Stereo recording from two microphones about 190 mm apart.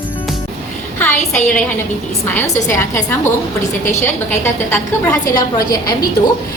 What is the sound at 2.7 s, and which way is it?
Speech, 15° left (ahead or behind).